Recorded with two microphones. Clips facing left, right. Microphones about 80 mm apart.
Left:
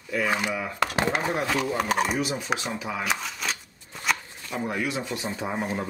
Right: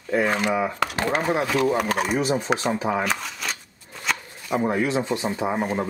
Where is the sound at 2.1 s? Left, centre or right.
Right.